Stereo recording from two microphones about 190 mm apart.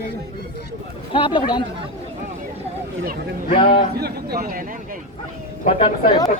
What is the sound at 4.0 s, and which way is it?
Speech, 55° right (ahead or behind).